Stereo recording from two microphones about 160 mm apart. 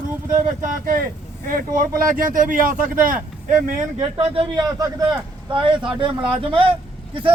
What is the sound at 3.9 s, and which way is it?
Speech, 35° right (ahead or behind).